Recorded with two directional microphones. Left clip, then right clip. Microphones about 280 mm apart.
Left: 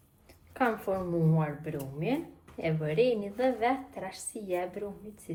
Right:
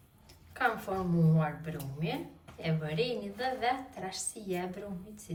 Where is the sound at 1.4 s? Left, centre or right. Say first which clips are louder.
Left 1 dB; left.